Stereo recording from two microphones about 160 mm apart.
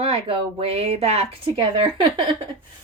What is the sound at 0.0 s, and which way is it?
Speech, 40° right (ahead or behind).